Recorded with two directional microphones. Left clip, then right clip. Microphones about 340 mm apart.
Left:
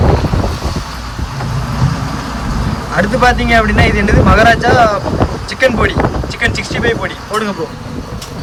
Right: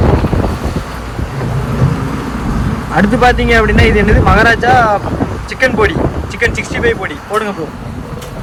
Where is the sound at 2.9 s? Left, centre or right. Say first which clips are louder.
Right 1 dB; centre.